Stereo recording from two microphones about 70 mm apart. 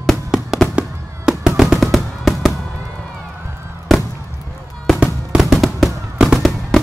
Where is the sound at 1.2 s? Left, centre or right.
Centre.